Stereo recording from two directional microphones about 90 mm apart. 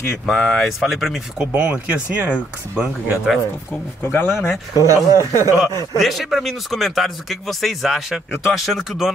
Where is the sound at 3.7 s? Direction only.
25° left (ahead or behind).